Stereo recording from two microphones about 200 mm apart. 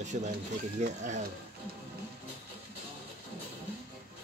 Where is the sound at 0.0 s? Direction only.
35° right (ahead or behind).